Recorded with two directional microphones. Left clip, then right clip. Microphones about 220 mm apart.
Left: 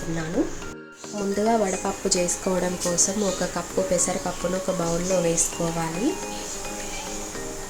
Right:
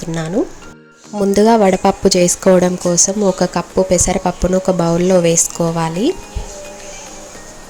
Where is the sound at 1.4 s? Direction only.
40° right (ahead or behind).